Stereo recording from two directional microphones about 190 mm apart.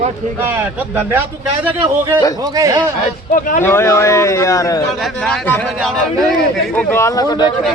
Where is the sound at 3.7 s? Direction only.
15° left (ahead or behind).